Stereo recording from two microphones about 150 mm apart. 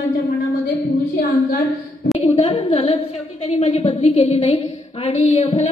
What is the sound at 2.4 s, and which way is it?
A woman's voice, 35° left (ahead or behind).